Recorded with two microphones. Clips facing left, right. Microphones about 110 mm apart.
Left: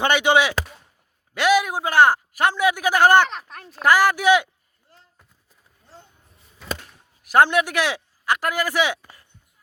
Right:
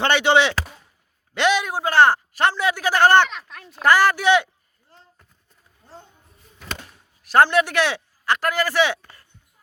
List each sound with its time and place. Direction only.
0.0 s a man's voice: 10° left (ahead or behind)
3.2 s speech: 40° left (ahead or behind)
3.7 s a man's voice: 10° left (ahead or behind)
6.6 s a sound: centre (ahead or behind)
7.2 s a man's voice: 15° left (ahead or behind)